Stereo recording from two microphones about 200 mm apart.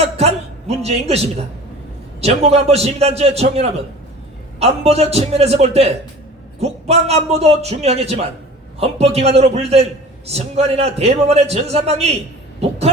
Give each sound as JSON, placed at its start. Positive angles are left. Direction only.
{"t": 0.0, "sound": "a man's voice", "side_deg": -30}